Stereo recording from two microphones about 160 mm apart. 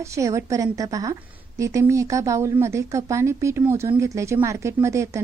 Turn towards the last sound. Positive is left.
turn(degrees=-20)  # may be behind; listen again after turning